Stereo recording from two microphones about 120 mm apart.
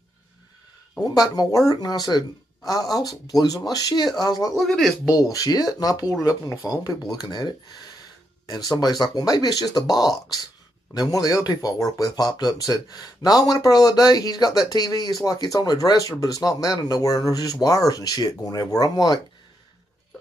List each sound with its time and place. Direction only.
1.3 s speech: 35° left (ahead or behind)
4.6 s speech: centre (ahead or behind)
5.1 s speech: 30° left (ahead or behind)